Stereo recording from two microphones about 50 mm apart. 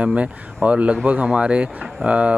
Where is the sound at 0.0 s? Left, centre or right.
Right.